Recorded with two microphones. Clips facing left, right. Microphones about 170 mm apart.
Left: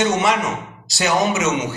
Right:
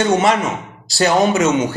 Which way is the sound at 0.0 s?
35° right (ahead or behind).